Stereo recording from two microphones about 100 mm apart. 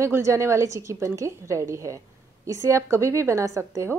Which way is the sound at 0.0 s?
30° right (ahead or behind).